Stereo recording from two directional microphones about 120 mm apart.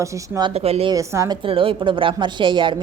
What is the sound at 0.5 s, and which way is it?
Speech, 55° right (ahead or behind).